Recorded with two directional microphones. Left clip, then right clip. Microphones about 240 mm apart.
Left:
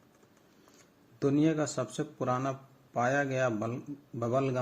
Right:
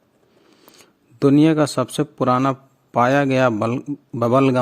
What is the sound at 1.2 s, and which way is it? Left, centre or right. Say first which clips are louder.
A man's voice: right 13 dB; right.